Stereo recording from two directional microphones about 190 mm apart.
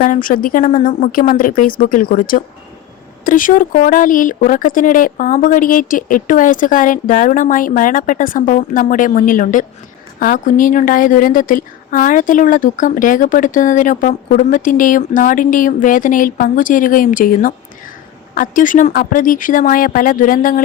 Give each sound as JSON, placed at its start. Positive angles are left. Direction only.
{"t": 0.0, "sound": "a woman's voice", "side_deg": 45}